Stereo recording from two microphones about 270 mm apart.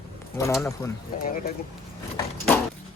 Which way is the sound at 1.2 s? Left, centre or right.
Left.